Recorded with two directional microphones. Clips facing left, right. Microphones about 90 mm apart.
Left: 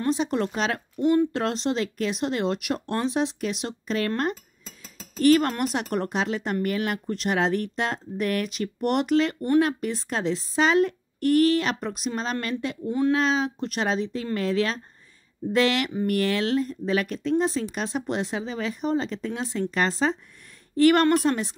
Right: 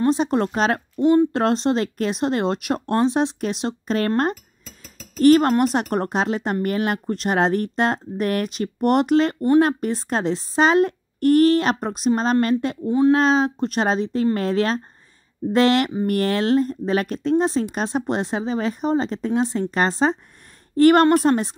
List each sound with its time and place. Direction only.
0.0 s speech: 40° right (ahead or behind)
4.2 s cutlery: 40° right (ahead or behind)
5.2 s speech: 40° right (ahead or behind)